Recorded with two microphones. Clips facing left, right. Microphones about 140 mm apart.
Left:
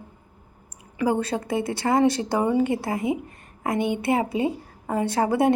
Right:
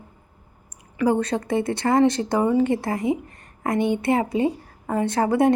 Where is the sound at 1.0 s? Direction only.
10° left (ahead or behind).